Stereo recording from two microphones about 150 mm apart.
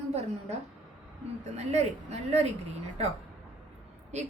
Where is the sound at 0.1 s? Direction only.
45° right (ahead or behind).